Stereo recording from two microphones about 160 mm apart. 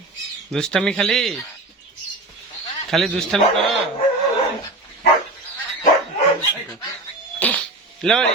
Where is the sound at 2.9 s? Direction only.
Centre (ahead or behind).